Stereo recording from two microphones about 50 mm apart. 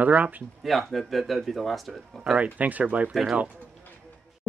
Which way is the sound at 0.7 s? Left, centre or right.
Centre.